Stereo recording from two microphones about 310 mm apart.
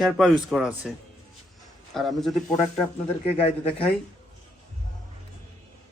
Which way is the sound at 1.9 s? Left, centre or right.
Centre.